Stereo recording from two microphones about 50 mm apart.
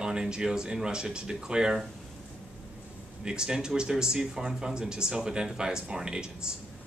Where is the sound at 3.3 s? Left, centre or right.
Centre.